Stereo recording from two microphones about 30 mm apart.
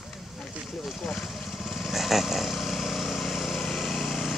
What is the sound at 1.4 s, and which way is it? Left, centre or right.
Vehicle, centre.